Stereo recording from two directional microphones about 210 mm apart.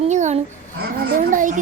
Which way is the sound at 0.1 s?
35° right (ahead or behind).